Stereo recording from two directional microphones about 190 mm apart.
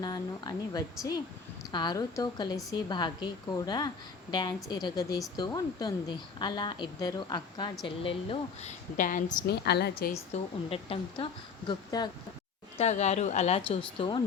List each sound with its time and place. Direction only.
0.0 s a woman's voice: 20° left (ahead or behind)
9.0 s a woman's voice: 45° left (ahead or behind)
10.3 s a woman's voice: 30° left (ahead or behind)
12.7 s a woman's voice: 35° left (ahead or behind)